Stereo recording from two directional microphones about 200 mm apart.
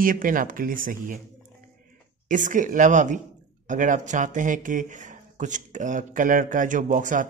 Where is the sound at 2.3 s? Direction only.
40° right (ahead or behind).